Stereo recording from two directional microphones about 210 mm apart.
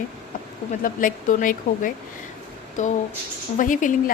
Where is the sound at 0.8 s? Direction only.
40° left (ahead or behind).